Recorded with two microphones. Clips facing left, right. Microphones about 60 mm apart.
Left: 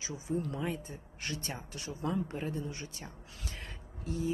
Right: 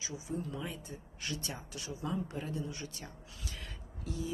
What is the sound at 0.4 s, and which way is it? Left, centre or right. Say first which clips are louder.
Speech: left 5 dB; left.